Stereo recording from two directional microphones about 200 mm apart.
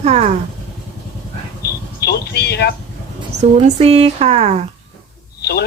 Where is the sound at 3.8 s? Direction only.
30° right (ahead or behind).